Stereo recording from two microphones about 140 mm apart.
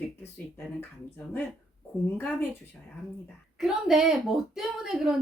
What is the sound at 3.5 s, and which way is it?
A woman's voice, 5° right (ahead or behind).